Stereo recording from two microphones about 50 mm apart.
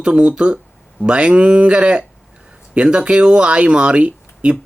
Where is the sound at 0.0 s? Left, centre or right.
Right.